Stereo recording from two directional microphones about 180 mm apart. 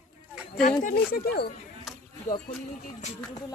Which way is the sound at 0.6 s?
45° left (ahead or behind).